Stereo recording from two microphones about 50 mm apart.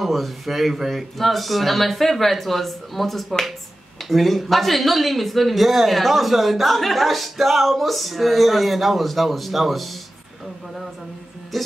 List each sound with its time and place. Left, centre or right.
0.0 s speech: centre
11.5 s speech: centre